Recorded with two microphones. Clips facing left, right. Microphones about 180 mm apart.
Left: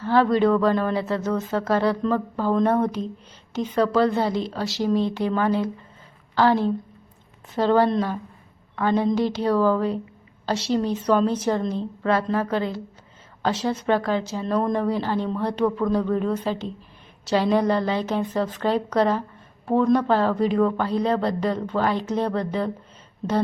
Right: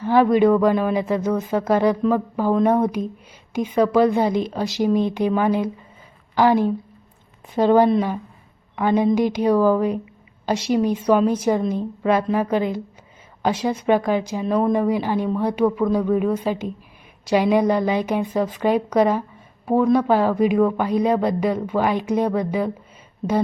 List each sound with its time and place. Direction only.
0.0 s speech: 15° right (ahead or behind)